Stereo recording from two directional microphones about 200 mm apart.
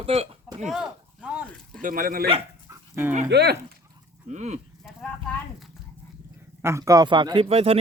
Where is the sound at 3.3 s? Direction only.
55° right (ahead or behind).